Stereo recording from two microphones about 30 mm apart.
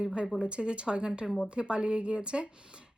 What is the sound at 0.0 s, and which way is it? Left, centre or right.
Speech, right.